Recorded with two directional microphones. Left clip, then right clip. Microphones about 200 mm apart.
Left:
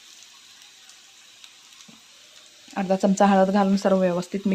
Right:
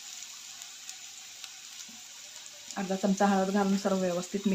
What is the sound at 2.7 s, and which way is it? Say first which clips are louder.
Speech: left 9 dB; 40° left (ahead or behind).